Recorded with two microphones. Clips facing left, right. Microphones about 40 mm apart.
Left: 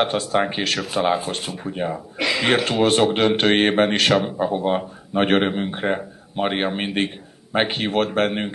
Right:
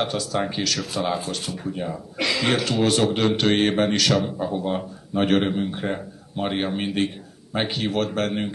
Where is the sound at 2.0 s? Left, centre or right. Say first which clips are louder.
Left 2 dB; centre.